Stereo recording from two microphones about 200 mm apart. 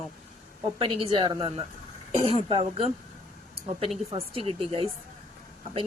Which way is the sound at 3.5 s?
30° right (ahead or behind).